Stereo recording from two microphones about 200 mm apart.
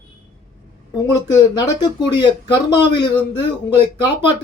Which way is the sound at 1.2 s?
20° left (ahead or behind).